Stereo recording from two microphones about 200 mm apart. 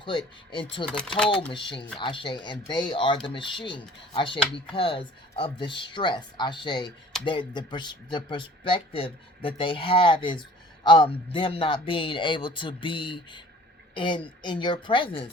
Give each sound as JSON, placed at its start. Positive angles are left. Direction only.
{"t": 0.0, "sound": "speech", "side_deg": 25}
{"t": 0.9, "sound": "speech", "side_deg": 5}
{"t": 1.5, "sound": "speech", "side_deg": 25}